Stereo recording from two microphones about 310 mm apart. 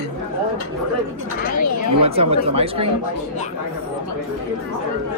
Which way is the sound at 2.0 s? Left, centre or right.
Centre.